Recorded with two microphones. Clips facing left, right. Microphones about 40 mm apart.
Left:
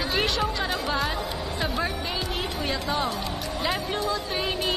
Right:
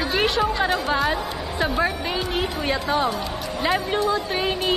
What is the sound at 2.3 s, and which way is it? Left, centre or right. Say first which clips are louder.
Speech: right 5 dB; right.